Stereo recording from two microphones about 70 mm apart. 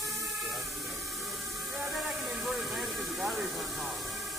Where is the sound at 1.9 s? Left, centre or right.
Centre.